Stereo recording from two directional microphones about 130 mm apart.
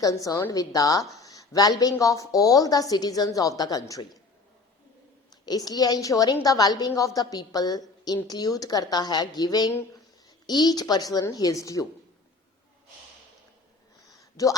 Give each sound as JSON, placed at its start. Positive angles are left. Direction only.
{"t": 0.0, "sound": "a woman's voice", "side_deg": 25}
{"t": 5.3, "sound": "a woman's voice", "side_deg": 30}
{"t": 14.4, "sound": "a woman's voice", "side_deg": 25}